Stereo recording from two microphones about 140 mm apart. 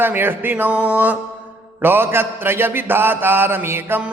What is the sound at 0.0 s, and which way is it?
Mantra, 15° right (ahead or behind).